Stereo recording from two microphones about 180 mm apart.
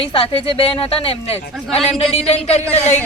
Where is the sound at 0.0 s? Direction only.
30° left (ahead or behind).